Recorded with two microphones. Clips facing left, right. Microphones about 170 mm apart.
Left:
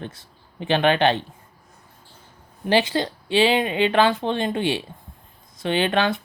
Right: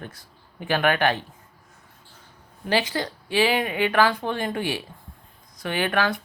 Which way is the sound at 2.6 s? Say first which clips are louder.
Left 4 dB; 25° left (ahead or behind).